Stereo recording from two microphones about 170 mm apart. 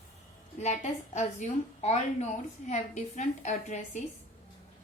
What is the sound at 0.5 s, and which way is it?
A woman's voice, 40° left (ahead or behind).